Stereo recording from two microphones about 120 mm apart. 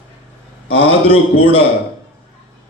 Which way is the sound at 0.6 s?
50° left (ahead or behind).